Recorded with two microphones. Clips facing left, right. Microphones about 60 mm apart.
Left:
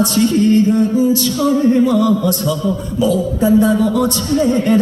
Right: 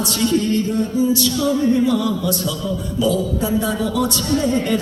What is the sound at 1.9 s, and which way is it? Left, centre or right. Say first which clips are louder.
A man's voice: left 5 dB; left.